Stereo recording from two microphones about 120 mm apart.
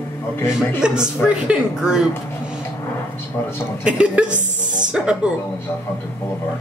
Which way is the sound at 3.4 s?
20° left (ahead or behind).